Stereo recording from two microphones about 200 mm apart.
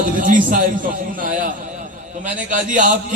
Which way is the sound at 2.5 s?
40° right (ahead or behind).